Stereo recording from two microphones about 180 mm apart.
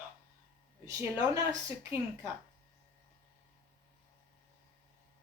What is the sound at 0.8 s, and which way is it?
Speech, 20° right (ahead or behind).